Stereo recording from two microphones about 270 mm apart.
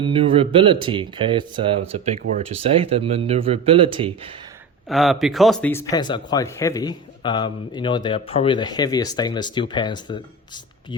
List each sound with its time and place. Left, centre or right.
0.0 s speech: centre
4.9 s speech: centre